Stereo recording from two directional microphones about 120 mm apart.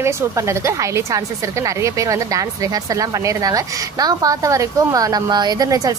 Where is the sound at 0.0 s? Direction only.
25° right (ahead or behind).